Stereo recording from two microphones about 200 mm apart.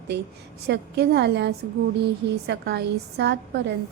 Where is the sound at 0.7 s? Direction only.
60° right (ahead or behind).